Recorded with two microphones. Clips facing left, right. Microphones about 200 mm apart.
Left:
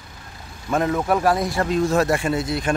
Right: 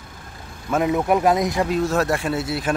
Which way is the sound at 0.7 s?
10° right (ahead or behind).